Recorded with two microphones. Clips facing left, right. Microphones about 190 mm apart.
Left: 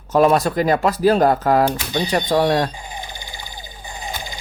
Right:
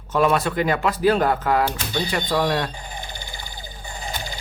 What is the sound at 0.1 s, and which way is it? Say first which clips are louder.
Speech: left 5 dB; 40° left (ahead or behind).